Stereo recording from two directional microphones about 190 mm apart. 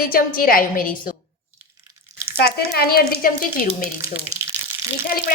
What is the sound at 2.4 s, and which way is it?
Speech, 55° left (ahead or behind).